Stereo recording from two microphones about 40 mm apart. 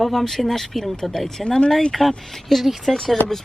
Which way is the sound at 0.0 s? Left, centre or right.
Centre.